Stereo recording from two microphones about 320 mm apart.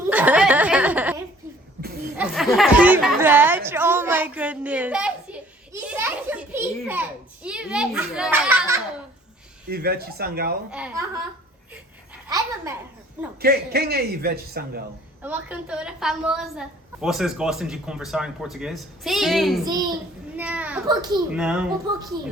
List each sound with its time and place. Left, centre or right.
0.1 s snicker: centre
2.1 s a woman's voice: centre
5.8 s a sound: centre
9.6 s a man's voice: right
10.7 s a woman's voice: centre
13.4 s a man's voice: right
15.2 s a woman's voice: centre
19.6 s a woman's voice: centre